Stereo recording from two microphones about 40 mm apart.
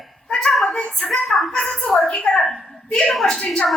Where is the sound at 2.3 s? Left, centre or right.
Left.